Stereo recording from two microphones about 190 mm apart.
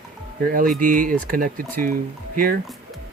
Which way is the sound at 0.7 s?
45° right (ahead or behind).